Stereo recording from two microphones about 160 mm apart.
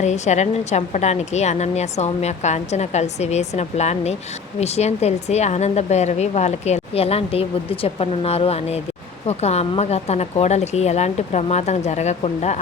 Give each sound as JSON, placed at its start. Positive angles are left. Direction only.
{"t": 0.0, "sound": "speech", "side_deg": 45}